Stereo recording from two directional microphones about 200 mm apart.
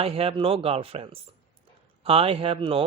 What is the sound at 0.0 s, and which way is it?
Speech, 30° right (ahead or behind).